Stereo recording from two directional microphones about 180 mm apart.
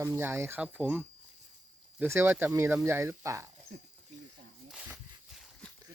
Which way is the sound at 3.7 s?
55° right (ahead or behind).